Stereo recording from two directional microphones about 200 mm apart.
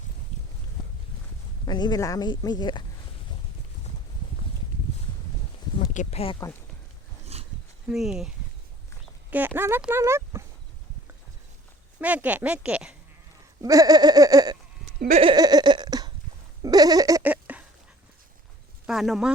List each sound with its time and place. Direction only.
1.6 s speech: 20° left (ahead or behind)
5.8 s speech: 35° left (ahead or behind)
7.3 s dog: 30° right (ahead or behind)
7.9 s speech: 5° right (ahead or behind)
9.6 s speech: 10° right (ahead or behind)
11.9 s speech: 5° right (ahead or behind)
13.6 s a sound: 20° right (ahead or behind)
18.9 s speech: centre (ahead or behind)